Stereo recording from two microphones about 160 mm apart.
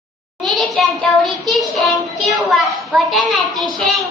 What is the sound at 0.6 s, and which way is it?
Child singing, centre (ahead or behind).